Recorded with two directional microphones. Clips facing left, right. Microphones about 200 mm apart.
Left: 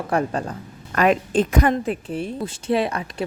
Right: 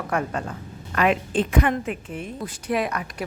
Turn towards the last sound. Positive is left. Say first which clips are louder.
# left 3 dB
turn(degrees=30)  # may be behind; listen again after turning